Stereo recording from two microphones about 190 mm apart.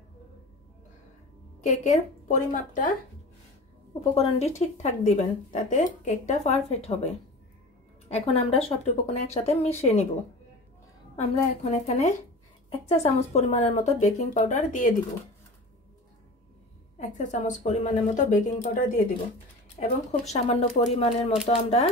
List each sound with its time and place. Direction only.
1.6 s a woman's voice: 40° left (ahead or behind)
4.0 s a woman's voice: 30° left (ahead or behind)
11.1 s a woman's voice: 35° left (ahead or behind)
17.3 s a woman's voice: 40° left (ahead or behind)